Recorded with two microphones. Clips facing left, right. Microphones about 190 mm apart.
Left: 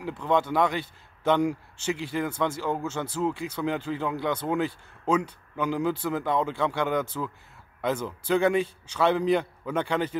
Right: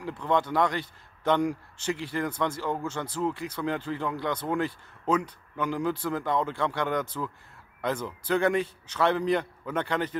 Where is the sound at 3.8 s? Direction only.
10° left (ahead or behind).